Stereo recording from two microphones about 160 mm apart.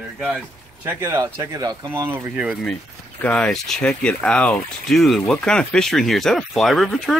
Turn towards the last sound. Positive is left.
turn(degrees=0)  # may be behind; listen again after turning